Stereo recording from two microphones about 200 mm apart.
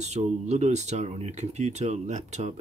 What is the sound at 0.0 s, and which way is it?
Speech, 35° right (ahead or behind).